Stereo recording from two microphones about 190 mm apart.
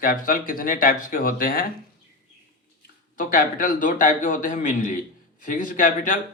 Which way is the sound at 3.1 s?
45° left (ahead or behind).